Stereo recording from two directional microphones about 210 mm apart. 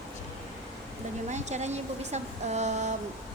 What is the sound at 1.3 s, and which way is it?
Speech, 35° right (ahead or behind).